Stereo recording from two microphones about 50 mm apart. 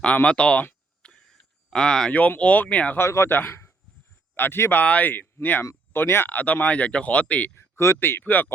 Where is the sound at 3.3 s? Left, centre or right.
Left.